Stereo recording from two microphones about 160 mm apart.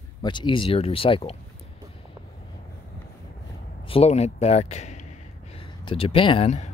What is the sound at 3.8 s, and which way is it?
Speech, 35° left (ahead or behind).